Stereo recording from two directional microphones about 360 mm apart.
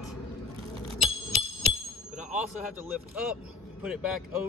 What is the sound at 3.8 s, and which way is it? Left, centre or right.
Speech, centre.